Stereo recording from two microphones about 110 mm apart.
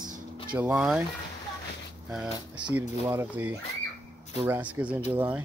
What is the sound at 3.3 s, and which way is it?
Speech, 20° right (ahead or behind).